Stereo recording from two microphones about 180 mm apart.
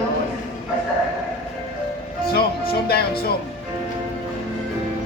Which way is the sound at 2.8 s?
60° left (ahead or behind).